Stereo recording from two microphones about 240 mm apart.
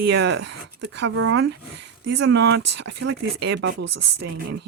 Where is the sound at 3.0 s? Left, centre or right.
Right.